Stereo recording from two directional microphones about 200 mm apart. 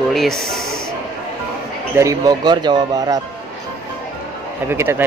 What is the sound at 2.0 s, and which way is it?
Speech, 15° right (ahead or behind).